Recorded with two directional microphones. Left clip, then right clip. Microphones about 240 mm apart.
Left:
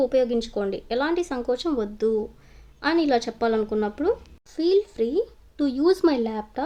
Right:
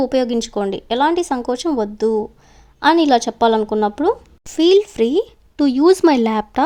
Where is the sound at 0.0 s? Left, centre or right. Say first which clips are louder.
Right 4 dB; right.